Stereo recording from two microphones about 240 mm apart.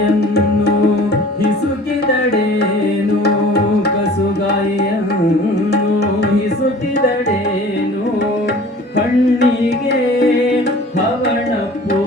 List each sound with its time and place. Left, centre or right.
0.0 s music: left
9.0 s music: left